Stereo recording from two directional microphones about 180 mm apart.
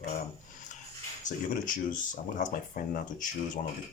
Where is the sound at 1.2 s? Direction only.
50° left (ahead or behind).